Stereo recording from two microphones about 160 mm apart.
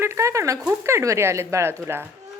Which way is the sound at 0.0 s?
15° right (ahead or behind).